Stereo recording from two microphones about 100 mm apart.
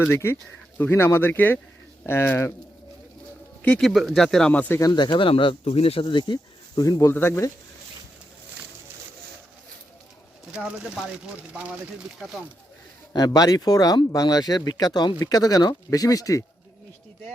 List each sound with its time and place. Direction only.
0.0 s speech: 25° left (ahead or behind)
3.6 s speech: 10° left (ahead or behind)
4.9 s speech: 50° left (ahead or behind)
5.3 s speech: 65° left (ahead or behind)
6.1 s speech: 50° left (ahead or behind)
7.0 s speech: 25° left (ahead or behind)
10.5 s speech: 10° right (ahead or behind)
13.1 s speech: 40° left (ahead or behind)